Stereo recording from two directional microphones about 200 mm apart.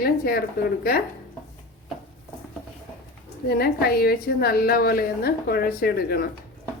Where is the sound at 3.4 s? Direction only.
50° left (ahead or behind).